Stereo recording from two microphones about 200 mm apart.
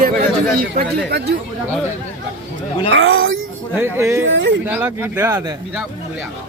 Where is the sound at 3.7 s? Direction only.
10° right (ahead or behind).